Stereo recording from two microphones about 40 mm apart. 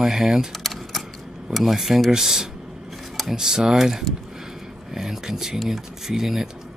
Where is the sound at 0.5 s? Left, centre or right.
Centre.